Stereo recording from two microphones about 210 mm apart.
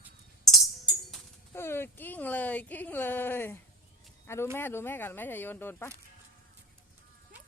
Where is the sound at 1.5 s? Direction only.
10° left (ahead or behind).